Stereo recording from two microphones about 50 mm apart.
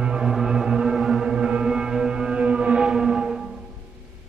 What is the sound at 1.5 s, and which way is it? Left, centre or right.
Whale vocalization, centre.